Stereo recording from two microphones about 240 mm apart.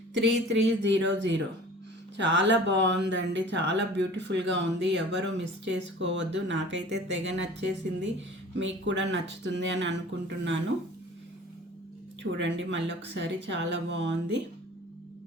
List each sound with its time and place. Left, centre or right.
0.1 s speech: right
8.5 s speech: right
12.2 s speech: right